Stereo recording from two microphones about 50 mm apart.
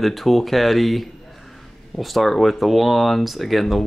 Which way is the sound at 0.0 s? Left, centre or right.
Centre.